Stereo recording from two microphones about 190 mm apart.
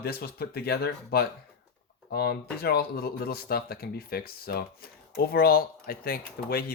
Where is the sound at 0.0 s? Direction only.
55° left (ahead or behind).